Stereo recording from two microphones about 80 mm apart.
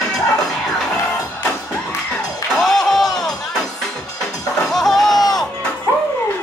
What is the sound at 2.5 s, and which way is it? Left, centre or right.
Music, centre.